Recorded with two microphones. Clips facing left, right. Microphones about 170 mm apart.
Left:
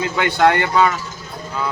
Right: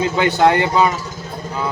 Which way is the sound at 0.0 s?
25° right (ahead or behind).